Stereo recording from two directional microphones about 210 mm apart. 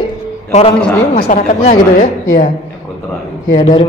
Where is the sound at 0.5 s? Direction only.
30° left (ahead or behind).